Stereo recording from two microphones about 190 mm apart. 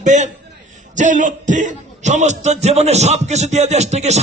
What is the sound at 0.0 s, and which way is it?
A man's voice, 40° right (ahead or behind).